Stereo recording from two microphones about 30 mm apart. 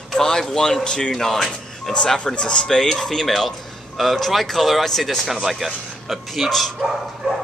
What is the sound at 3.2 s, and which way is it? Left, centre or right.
A man's voice, centre.